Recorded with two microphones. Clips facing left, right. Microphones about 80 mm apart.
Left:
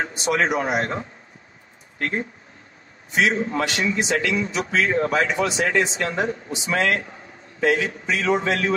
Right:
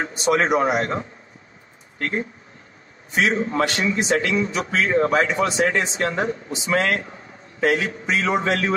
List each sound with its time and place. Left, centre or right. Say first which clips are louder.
0.0 s a man's voice: right 2 dB; right
2.0 s speech: even; left
3.1 s a man's voice: even; right